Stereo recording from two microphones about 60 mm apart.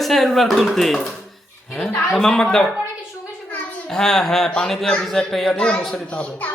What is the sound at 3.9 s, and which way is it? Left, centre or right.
Speech, centre.